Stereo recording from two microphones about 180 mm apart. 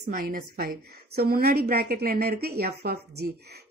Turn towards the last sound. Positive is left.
turn(degrees=-60)  # may be behind; listen again after turning